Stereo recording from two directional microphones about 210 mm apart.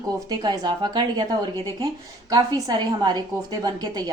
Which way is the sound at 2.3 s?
20° right (ahead or behind).